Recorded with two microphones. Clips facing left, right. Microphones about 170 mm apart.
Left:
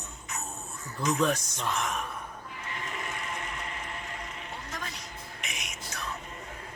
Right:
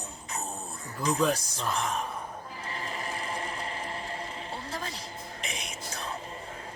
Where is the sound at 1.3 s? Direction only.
35° right (ahead or behind).